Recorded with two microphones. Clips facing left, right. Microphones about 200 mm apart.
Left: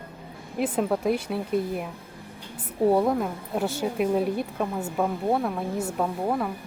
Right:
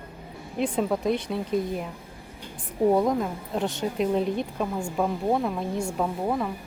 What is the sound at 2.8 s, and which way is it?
A woman's voice, 5° left (ahead or behind).